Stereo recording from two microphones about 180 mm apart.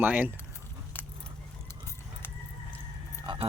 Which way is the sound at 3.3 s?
25° right (ahead or behind).